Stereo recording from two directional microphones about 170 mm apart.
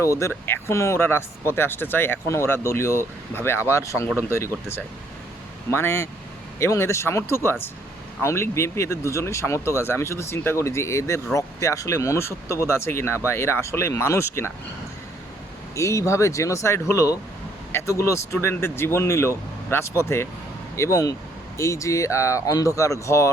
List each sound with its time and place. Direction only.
0.0 s speech: 15° left (ahead or behind)
5.7 s speech: 15° left (ahead or behind)
15.7 s speech: 15° left (ahead or behind)